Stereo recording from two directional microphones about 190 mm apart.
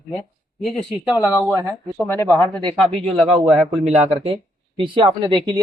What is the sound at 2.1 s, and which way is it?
Speech, 10° left (ahead or behind).